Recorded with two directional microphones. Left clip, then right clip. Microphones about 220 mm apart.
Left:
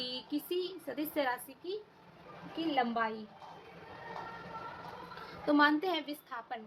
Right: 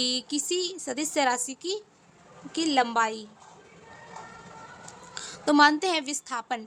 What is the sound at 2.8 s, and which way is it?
Speech, 55° right (ahead or behind).